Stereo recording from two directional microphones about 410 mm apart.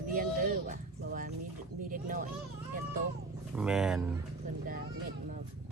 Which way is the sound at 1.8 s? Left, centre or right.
Centre.